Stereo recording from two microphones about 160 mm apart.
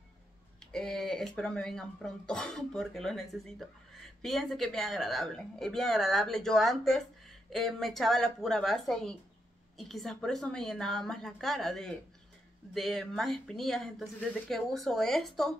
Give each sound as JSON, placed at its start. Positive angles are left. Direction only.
{"t": 0.7, "sound": "speech", "side_deg": 5}